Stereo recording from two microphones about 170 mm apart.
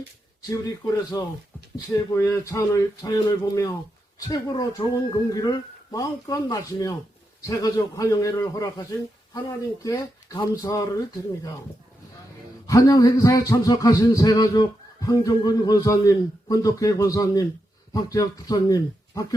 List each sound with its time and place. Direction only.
0.5 s a man's voice: 20° left (ahead or behind)
12.6 s a man's voice: 20° left (ahead or behind)